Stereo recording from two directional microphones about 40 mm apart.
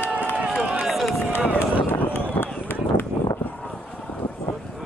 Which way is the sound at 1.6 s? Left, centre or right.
Left.